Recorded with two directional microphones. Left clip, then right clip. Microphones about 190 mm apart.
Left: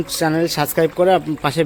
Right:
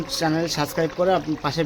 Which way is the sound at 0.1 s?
45° left (ahead or behind).